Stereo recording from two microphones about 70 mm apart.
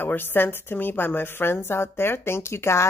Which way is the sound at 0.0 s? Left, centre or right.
Left.